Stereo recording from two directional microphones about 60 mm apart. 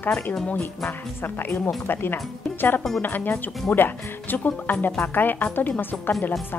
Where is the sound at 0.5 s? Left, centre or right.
Left.